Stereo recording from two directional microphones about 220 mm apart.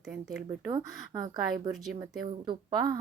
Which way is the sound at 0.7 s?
20° right (ahead or behind).